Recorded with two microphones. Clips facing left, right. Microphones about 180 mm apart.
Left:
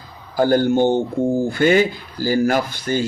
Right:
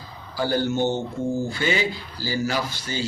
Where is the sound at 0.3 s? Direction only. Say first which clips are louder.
Left 8 dB; 50° left (ahead or behind).